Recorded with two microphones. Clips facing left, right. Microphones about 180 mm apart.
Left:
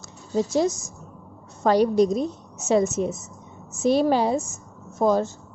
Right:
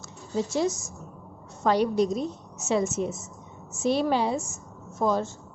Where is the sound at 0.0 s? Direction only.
40° left (ahead or behind).